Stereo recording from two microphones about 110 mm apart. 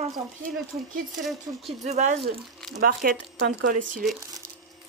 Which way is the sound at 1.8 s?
90° right.